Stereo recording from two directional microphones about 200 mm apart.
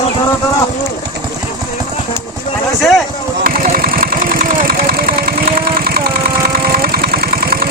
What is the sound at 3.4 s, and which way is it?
Vehicle, 45° right (ahead or behind).